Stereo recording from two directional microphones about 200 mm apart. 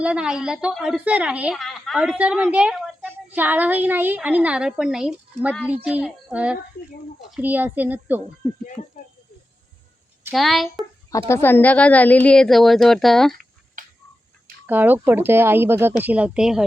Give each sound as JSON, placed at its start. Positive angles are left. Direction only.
{"t": 0.0, "sound": "a woman's voice", "side_deg": -5}
{"t": 10.3, "sound": "a woman's voice", "side_deg": 0}
{"t": 11.3, "sound": "a woman's voice", "side_deg": 10}
{"t": 13.8, "sound": "tick-tock", "side_deg": -40}
{"t": 14.7, "sound": "speech", "side_deg": -10}